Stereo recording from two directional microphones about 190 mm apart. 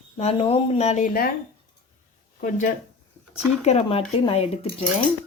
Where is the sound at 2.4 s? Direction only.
45° left (ahead or behind).